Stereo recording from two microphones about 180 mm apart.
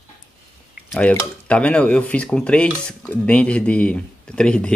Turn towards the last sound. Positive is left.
turn(degrees=5)  # may be behind; listen again after turning